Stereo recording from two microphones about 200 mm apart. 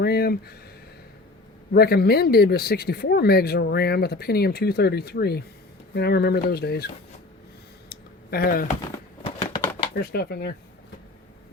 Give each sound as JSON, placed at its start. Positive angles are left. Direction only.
{"t": 0.0, "sound": "speech", "side_deg": 50}
{"t": 1.7, "sound": "speech", "side_deg": 50}
{"t": 7.9, "sound": "a sound", "side_deg": 50}
{"t": 9.9, "sound": "speech", "side_deg": 50}